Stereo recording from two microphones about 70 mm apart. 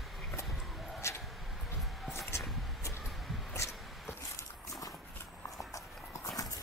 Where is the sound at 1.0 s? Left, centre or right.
Left.